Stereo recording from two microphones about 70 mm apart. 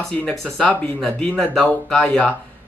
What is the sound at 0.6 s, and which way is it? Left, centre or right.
Speech, left.